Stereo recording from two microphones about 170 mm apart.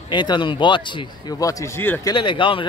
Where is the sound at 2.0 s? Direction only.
30° left (ahead or behind).